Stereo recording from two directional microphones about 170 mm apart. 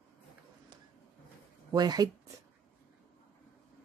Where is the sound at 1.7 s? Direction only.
25° right (ahead or behind).